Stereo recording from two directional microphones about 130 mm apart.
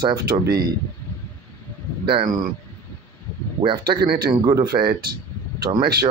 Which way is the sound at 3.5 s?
40° right (ahead or behind).